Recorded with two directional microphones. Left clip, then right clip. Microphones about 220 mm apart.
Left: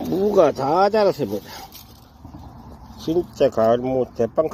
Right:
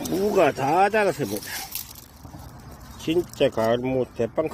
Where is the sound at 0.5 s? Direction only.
Centre (ahead or behind).